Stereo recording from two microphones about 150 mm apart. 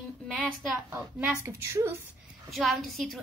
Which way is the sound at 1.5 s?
20° right (ahead or behind).